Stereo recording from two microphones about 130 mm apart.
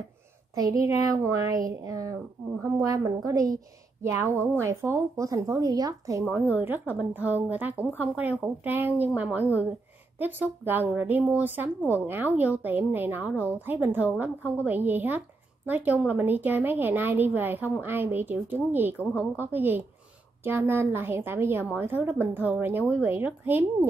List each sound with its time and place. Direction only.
0.6 s a woman's voice: 25° right (ahead or behind)
6.2 s a woman's voice: 10° right (ahead or behind)